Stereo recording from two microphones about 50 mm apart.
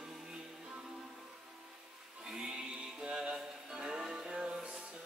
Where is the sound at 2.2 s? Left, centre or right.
Centre.